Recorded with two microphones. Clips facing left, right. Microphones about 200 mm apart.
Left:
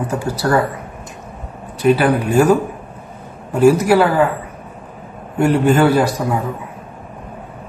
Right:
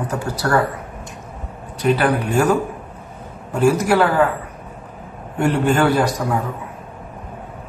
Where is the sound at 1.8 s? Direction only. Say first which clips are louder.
Left 4 dB; 5° left (ahead or behind).